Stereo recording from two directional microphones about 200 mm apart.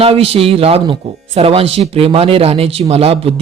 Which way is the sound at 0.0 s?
30° right (ahead or behind).